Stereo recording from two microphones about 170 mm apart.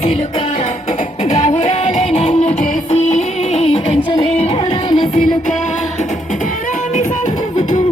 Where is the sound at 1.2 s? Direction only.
40° left (ahead or behind).